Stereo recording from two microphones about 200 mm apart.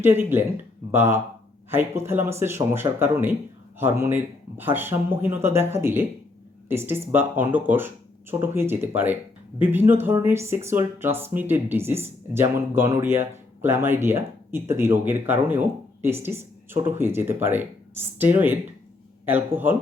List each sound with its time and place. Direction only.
0.0 s speech: 10° right (ahead or behind)